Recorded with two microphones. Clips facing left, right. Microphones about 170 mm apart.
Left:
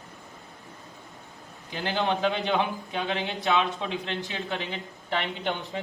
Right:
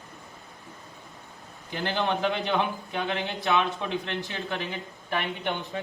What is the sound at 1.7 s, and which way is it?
A man's voice, 15° left (ahead or behind).